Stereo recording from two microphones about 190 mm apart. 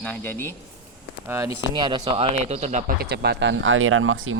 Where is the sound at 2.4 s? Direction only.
35° right (ahead or behind).